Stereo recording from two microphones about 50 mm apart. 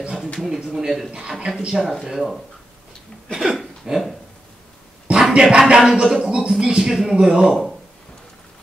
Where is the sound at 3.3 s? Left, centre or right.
Centre.